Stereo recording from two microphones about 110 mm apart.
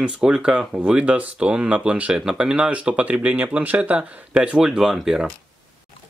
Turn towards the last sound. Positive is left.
turn(degrees=-5)  # may be behind; listen again after turning